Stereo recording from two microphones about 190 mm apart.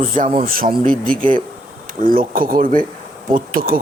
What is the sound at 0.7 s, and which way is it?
Speech, 5° left (ahead or behind).